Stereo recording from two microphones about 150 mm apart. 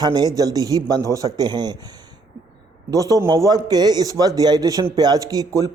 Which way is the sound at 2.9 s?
25° right (ahead or behind).